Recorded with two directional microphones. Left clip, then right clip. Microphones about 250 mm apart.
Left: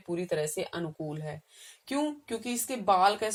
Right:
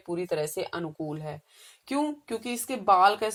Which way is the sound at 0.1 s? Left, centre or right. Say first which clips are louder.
Right 2 dB; right.